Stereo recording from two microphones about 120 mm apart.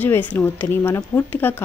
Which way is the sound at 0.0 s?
15° left (ahead or behind).